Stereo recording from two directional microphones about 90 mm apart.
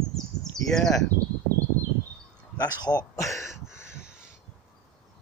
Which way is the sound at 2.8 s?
40° left (ahead or behind).